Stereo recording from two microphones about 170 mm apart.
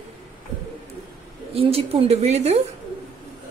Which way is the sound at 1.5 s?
35° right (ahead or behind).